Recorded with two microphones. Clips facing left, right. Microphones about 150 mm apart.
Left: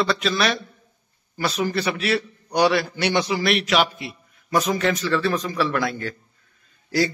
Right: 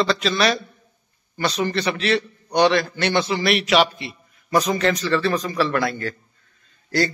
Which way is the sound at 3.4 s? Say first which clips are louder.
Right 2 dB; centre (ahead or behind).